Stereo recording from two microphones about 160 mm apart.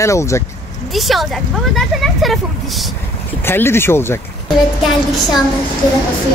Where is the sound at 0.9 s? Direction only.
Centre (ahead or behind).